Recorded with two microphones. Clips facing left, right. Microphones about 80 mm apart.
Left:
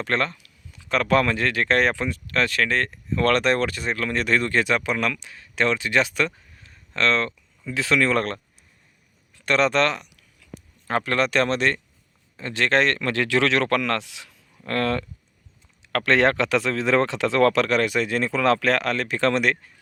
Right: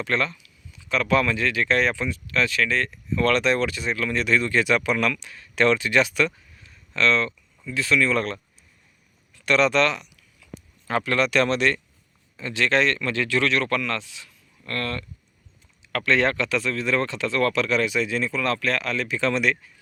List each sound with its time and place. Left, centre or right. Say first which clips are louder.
0.0 s speech: left 1 dB; left
4.6 s speech: right 1 dB; left
7.7 s speech: left 1 dB; left
9.3 s speech: even; left
15.8 s speech: left 2 dB; left